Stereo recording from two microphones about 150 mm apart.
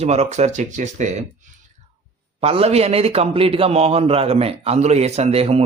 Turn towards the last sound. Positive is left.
turn(degrees=-40)  # may be behind; listen again after turning